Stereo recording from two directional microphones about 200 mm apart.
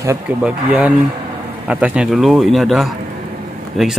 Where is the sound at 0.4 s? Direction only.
5° right (ahead or behind).